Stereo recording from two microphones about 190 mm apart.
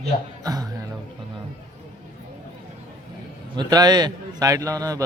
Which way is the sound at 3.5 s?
20° right (ahead or behind).